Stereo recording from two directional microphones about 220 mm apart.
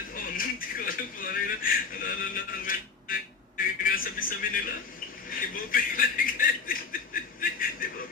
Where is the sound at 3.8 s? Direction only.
40° left (ahead or behind).